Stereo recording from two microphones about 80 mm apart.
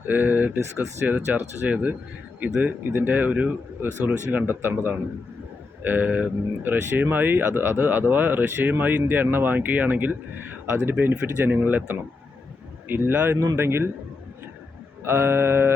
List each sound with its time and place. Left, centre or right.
0.0 s a man's voice: right
15.0 s speech: right